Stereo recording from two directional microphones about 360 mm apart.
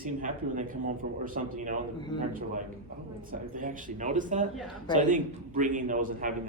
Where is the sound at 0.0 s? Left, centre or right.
Right.